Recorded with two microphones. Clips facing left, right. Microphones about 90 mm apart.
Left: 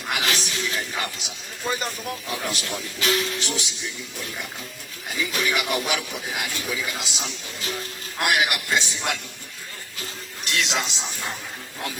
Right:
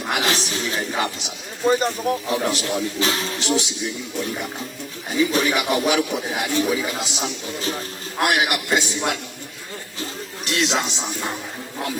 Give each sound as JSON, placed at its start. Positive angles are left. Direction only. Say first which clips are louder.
{"t": 0.1, "sound": "a man's voice", "louder": "right 3 dB", "side_deg": -35}
{"t": 5.1, "sound": "a man's voice", "louder": "right 6 dB", "side_deg": -35}
{"t": 10.0, "sound": "a sound", "louder": "right 5 dB", "side_deg": -35}